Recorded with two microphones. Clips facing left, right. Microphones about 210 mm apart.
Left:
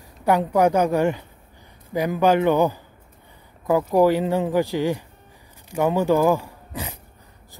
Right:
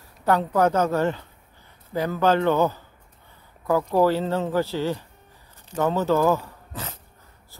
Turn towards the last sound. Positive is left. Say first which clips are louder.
# left 3 dB
turn(degrees=10)  # may be behind; listen again after turning